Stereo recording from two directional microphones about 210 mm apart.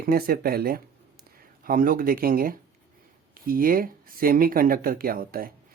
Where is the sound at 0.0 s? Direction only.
45° right (ahead or behind).